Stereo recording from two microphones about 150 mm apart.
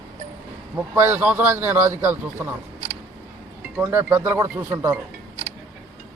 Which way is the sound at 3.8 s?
15° right (ahead or behind).